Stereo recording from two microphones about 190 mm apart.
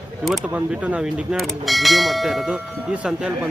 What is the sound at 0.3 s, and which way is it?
Speech, 5° right (ahead or behind).